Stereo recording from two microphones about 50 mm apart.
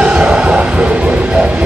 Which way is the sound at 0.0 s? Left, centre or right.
Right.